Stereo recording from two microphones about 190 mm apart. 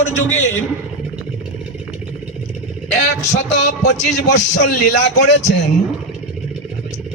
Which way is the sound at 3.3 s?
40° left (ahead or behind).